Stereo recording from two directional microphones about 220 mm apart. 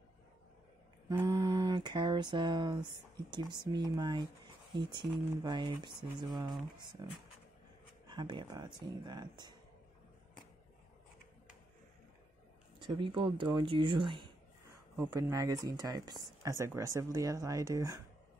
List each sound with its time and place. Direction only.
1.0 s a sound: 15° right (ahead or behind)
5.4 s speech: 20° right (ahead or behind)
8.1 s speech: 20° right (ahead or behind)
12.7 s speech: 20° right (ahead or behind)